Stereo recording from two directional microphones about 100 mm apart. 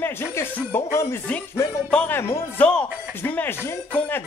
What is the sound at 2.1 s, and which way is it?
Speech, 25° left (ahead or behind).